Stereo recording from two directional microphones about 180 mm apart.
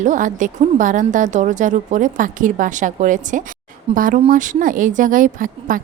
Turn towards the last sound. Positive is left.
turn(degrees=-50)  # may be behind; listen again after turning